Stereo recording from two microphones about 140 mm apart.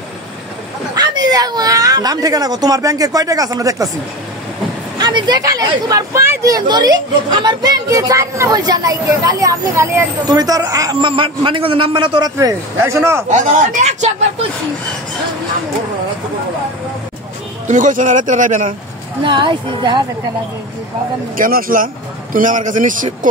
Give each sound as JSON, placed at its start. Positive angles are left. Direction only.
{"t": 0.9, "sound": "speech", "side_deg": -30}
{"t": 4.9, "sound": "speech", "side_deg": -30}
{"t": 13.3, "sound": "a man's voice", "side_deg": -60}
{"t": 17.6, "sound": "a man's voice", "side_deg": -65}
{"t": 19.2, "sound": "a woman's voice", "side_deg": -35}
{"t": 21.4, "sound": "a man's voice", "side_deg": -85}